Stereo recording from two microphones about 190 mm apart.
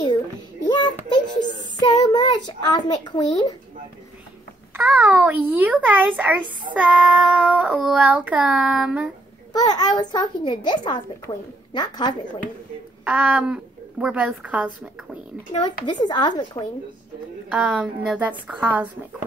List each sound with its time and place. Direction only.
0.7 s child singing: 25° left (ahead or behind)
1.8 s a sound: 20° left (ahead or behind)
4.7 s a woman's voice: 10° right (ahead or behind)
6.7 s child singing: 5° right (ahead or behind)
9.5 s a child's voice: 20° left (ahead or behind)
13.0 s a woman's voice: 10° right (ahead or behind)
15.6 s a child's voice: 25° left (ahead or behind)
17.5 s a woman's voice: 5° right (ahead or behind)